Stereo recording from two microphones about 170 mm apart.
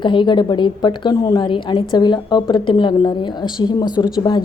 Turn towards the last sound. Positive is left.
turn(degrees=25)  # may be behind; listen again after turning